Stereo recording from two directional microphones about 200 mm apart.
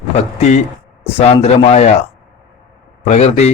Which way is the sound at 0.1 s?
30° left (ahead or behind).